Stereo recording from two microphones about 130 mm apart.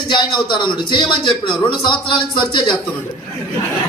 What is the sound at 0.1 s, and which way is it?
A man's voice, 35° left (ahead or behind).